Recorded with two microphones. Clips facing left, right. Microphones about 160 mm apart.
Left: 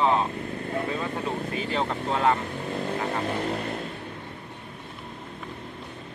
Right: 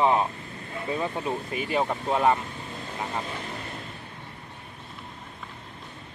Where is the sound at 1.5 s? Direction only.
15° right (ahead or behind).